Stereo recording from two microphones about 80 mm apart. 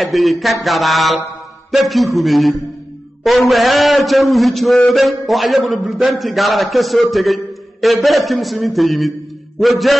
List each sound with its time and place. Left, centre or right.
0.0 s a man's voice: centre